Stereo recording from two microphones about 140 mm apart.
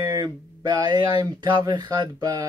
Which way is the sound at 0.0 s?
20° right (ahead or behind).